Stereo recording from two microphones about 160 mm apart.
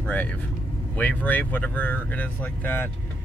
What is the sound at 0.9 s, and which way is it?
Speech, 10° left (ahead or behind).